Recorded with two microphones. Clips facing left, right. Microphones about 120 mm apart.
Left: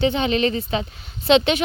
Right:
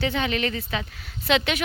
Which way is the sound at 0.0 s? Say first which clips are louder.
Left 6 dB; 25° left (ahead or behind).